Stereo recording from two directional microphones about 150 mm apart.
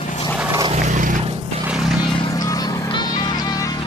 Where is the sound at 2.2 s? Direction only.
25° left (ahead or behind).